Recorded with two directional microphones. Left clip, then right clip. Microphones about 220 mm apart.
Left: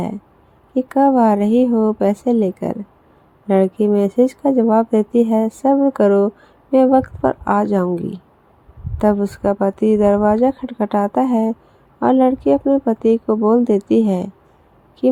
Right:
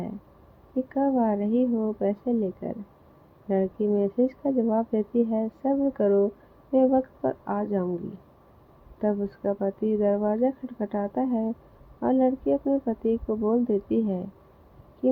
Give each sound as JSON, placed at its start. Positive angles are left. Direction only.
{"t": 0.8, "sound": "speech", "side_deg": 30}
{"t": 9.0, "sound": "speech", "side_deg": 30}